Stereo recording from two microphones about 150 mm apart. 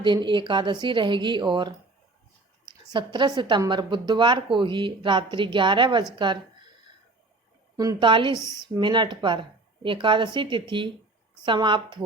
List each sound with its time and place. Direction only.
0.0 s a woman's voice: 35° right (ahead or behind)
2.9 s a woman's voice: 30° right (ahead or behind)
7.9 s a woman's voice: 30° right (ahead or behind)